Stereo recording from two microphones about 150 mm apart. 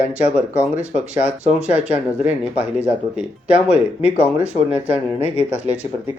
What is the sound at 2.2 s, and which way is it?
Speech, 10° right (ahead or behind).